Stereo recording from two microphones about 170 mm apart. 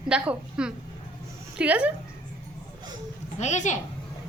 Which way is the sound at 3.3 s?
45° left (ahead or behind).